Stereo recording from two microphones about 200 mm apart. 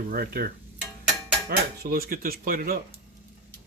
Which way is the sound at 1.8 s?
50° right (ahead or behind).